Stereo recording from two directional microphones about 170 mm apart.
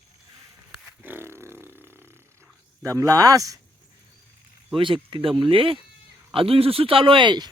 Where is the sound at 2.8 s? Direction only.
20° right (ahead or behind).